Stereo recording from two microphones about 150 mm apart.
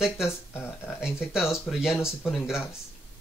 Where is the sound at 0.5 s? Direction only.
15° left (ahead or behind).